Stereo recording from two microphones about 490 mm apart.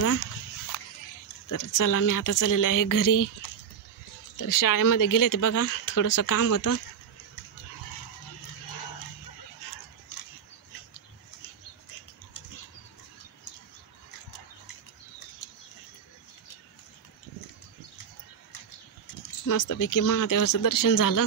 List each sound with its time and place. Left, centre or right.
1.5 s speech: left
19.4 s speech: left